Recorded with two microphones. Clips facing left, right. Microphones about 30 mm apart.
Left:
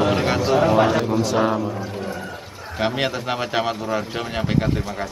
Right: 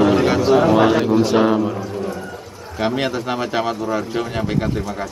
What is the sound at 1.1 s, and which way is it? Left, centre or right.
Speech, right.